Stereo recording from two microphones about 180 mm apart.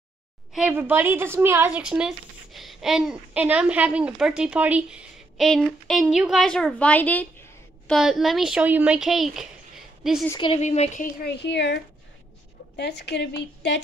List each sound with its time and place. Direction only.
0.5 s a woman's voice: 5° right (ahead or behind)
7.9 s a woman's voice: centre (ahead or behind)
10.6 s speech: 40° left (ahead or behind)
11.2 s a woman's voice: 70° left (ahead or behind)